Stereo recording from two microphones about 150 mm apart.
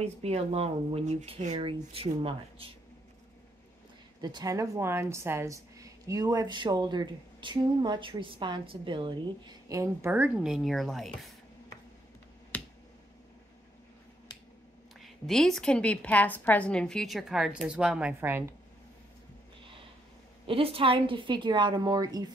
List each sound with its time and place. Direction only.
0.0 s a woman's voice: 45° right (ahead or behind)
4.2 s a woman's voice: 30° right (ahead or behind); by 11.2 s centre (ahead or behind)
12.5 s finger snapping: 10° left (ahead or behind)
15.0 s a woman's voice: centre (ahead or behind); by 18.5 s 15° right (ahead or behind)
20.4 s a woman's voice: 40° right (ahead or behind)